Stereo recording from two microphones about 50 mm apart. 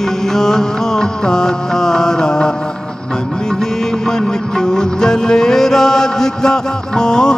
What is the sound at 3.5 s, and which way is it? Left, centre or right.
Music, centre.